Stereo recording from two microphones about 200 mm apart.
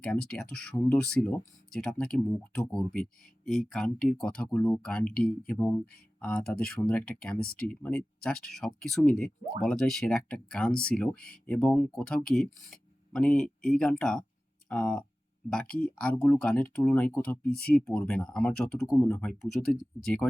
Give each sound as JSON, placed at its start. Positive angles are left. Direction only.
{"t": 0.0, "sound": "speech", "side_deg": 5}
{"t": 7.3, "sound": "speech", "side_deg": 50}
{"t": 7.7, "sound": "speech", "side_deg": 5}